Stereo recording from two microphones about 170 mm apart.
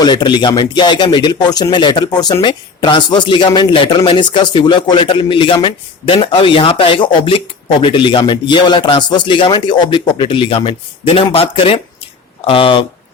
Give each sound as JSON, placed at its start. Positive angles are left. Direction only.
{"t": 0.0, "sound": "speech", "side_deg": 25}